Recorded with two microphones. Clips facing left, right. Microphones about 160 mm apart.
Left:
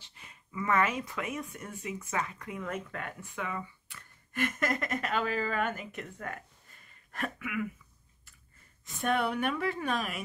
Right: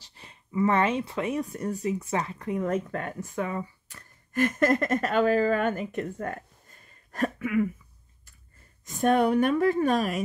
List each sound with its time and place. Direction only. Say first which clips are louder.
0.0 s speech: right 4 dB; 35° right (ahead or behind)
8.8 s a woman's voice: right 8 dB; 40° right (ahead or behind)